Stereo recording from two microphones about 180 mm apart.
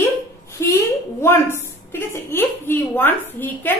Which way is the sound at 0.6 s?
15° left (ahead or behind).